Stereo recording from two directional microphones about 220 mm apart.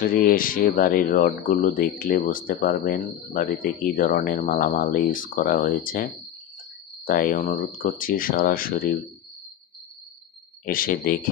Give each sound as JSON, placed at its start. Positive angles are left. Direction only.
{"t": 0.0, "sound": "speech", "side_deg": 40}
{"t": 7.1, "sound": "speech", "side_deg": 40}
{"t": 10.6, "sound": "speech", "side_deg": 40}